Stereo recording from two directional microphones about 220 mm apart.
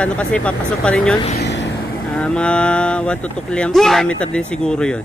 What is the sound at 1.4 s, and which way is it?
Vehicle, 50° left (ahead or behind).